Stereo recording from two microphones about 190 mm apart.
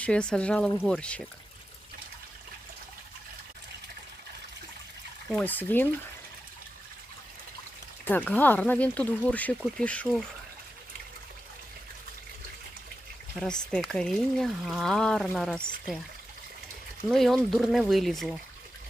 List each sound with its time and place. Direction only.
0.0 s speech: 5° left (ahead or behind)
5.3 s speech: 10° left (ahead or behind)
8.0 s speech: 10° left (ahead or behind)
13.3 s speech: 5° left (ahead or behind)
17.1 s speech: centre (ahead or behind)